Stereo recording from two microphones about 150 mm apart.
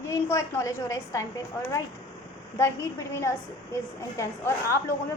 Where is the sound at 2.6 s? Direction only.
20° left (ahead or behind).